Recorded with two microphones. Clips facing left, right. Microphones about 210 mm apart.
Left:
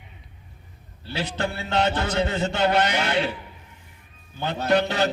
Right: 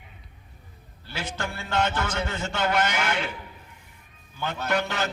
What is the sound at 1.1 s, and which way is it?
A man's voice, 35° left (ahead or behind).